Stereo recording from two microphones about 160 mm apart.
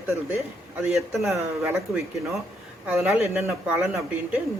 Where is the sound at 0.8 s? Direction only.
5° right (ahead or behind).